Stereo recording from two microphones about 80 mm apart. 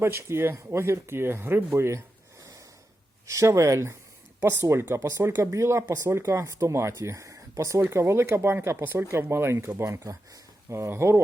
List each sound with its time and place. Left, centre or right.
0.0 s speech: right
3.2 s speech: right